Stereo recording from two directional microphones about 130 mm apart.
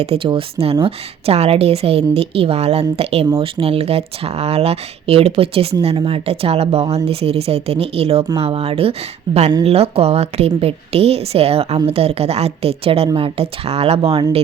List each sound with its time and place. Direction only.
0.0 s a woman's voice: 45° right (ahead or behind)